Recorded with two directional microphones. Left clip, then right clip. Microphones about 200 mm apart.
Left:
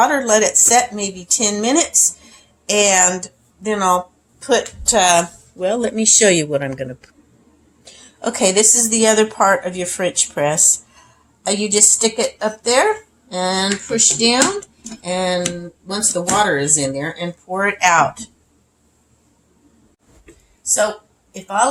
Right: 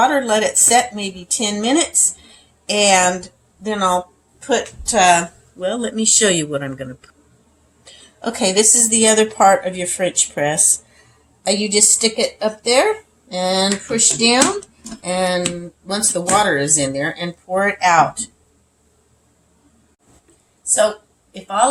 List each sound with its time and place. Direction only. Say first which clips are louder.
0.0 s a woman's voice: left 1 dB; 25° left (ahead or behind)
5.6 s a woman's voice: left 3 dB; 25° left (ahead or behind)